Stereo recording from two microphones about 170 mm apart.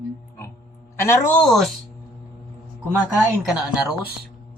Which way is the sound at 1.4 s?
Centre (ahead or behind).